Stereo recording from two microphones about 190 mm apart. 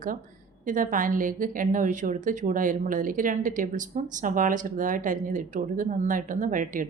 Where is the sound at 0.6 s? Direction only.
45° right (ahead or behind).